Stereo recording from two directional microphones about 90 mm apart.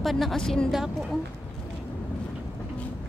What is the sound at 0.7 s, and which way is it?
Speech, 5° right (ahead or behind).